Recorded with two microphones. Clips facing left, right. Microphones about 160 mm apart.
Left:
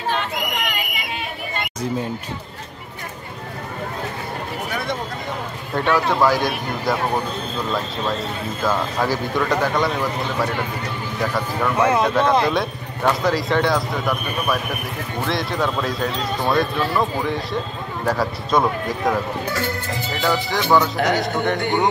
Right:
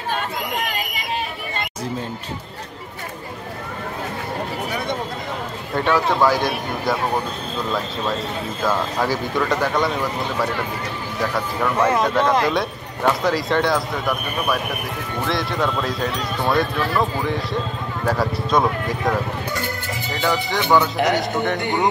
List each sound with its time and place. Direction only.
0.1 s chatter: 35° right (ahead or behind)
5.8 s speech: centre (ahead or behind)